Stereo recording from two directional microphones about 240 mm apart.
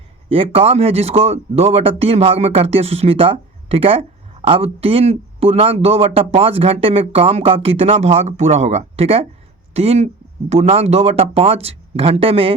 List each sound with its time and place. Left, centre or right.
0.3 s speech: right